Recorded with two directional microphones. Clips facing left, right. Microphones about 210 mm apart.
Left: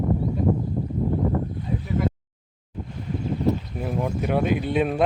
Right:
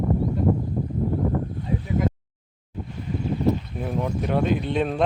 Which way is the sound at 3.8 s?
5° left (ahead or behind).